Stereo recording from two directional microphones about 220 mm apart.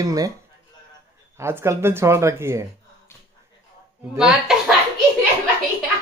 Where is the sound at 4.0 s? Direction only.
Centre (ahead or behind).